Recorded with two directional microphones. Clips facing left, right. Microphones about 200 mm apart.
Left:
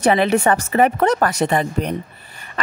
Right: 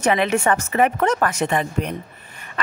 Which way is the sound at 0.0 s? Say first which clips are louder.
Left 3 dB; 35° left (ahead or behind).